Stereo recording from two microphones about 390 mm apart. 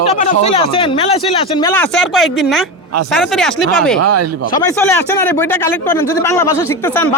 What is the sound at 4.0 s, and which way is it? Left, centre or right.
Speech, right.